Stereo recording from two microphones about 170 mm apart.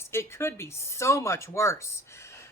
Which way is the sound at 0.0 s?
15° left (ahead or behind).